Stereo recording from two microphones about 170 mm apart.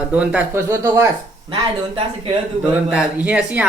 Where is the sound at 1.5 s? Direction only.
30° right (ahead or behind).